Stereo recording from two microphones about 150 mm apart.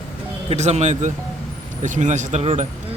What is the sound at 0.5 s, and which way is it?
Speech, 50° right (ahead or behind).